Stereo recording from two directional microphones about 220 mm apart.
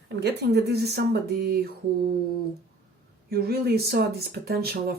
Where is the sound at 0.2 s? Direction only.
50° right (ahead or behind).